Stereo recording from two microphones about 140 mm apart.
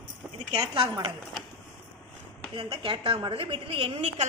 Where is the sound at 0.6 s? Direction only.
35° right (ahead or behind).